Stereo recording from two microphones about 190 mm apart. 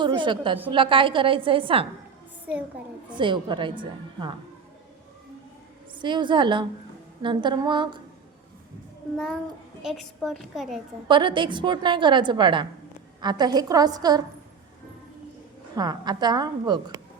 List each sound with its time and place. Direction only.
0.0 s a woman's voice: 25° right (ahead or behind)
3.1 s a woman's voice: 25° right (ahead or behind)
5.9 s a woman's voice: 25° right (ahead or behind)
9.1 s a woman's voice: centre (ahead or behind)
11.1 s a woman's voice: 25° right (ahead or behind)
15.7 s a woman's voice: 20° right (ahead or behind)